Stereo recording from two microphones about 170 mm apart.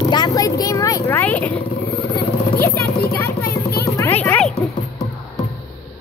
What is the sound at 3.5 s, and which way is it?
Music, 60° left (ahead or behind).